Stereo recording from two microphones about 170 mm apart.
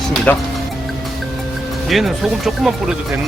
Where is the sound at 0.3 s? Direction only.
10° left (ahead or behind).